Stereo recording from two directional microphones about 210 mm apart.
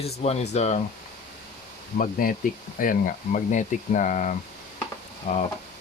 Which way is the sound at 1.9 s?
40° left (ahead or behind).